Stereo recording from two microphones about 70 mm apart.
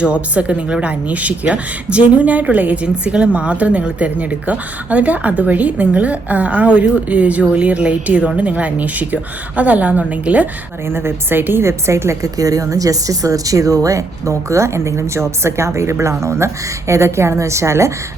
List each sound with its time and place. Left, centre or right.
0.0 s speech: centre
10.8 s a woman's voice: right